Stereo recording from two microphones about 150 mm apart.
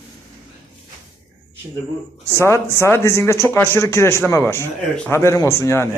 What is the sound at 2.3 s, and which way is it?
A man's voice, 20° left (ahead or behind).